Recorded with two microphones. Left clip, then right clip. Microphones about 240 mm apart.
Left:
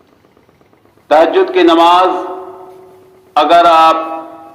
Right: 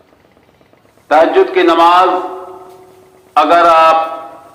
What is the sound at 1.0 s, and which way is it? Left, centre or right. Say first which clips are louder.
Cattle: even; left.